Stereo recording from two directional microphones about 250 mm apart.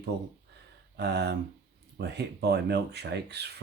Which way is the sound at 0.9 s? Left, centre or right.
Right.